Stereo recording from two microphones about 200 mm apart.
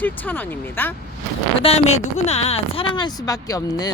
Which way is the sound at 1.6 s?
30° left (ahead or behind).